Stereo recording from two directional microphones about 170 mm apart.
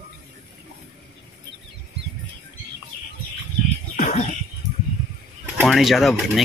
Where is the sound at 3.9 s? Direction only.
45° left (ahead or behind).